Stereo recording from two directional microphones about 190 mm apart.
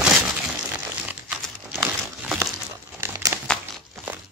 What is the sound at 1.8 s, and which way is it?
Crumpling, 10° right (ahead or behind).